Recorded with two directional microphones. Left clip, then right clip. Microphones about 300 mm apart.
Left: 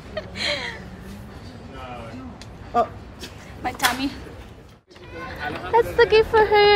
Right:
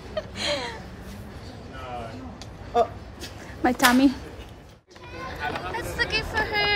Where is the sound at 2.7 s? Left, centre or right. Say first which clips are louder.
Left 1 dB; left.